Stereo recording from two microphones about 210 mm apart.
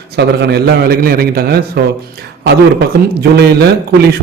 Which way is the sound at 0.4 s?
50° right (ahead or behind).